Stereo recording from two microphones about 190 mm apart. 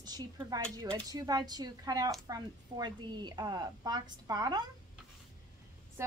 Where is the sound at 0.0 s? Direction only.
20° right (ahead or behind).